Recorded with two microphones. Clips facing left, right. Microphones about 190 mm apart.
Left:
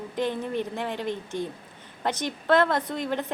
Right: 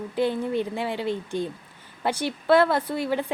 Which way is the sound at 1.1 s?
15° left (ahead or behind).